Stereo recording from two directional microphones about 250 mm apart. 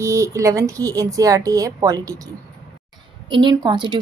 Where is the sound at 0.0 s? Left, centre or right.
Centre.